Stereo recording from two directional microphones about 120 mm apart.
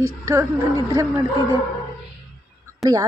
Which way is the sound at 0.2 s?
25° right (ahead or behind).